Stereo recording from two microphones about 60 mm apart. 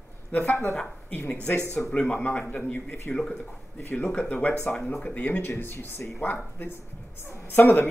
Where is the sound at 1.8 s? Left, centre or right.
Centre.